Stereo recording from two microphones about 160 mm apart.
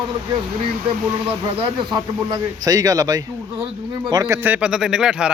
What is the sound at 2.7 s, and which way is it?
Speech, 20° right (ahead or behind).